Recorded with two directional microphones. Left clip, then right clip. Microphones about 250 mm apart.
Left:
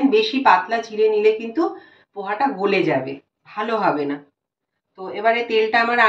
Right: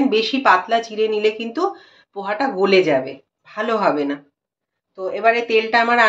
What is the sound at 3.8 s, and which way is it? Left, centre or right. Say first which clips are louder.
Speech: right 1 dB; right.